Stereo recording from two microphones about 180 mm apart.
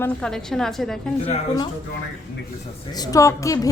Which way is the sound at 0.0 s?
5° left (ahead or behind).